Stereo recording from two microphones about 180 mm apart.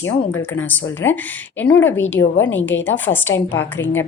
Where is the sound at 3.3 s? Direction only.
90° left.